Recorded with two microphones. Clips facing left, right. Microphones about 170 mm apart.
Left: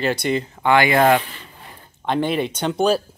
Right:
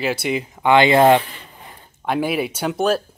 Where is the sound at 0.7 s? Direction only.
25° right (ahead or behind).